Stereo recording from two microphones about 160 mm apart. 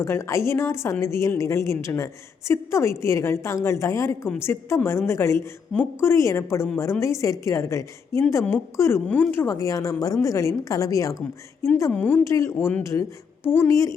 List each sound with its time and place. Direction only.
0.0 s a woman's voice: 15° left (ahead or behind)